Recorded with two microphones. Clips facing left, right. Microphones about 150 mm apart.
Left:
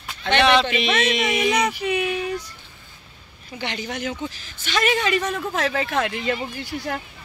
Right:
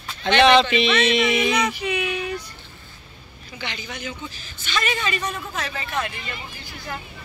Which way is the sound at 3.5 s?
65° left (ahead or behind).